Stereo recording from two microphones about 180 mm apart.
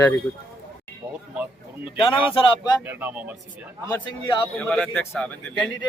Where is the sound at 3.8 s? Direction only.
25° left (ahead or behind).